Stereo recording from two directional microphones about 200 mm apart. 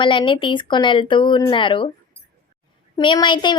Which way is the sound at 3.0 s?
25° left (ahead or behind).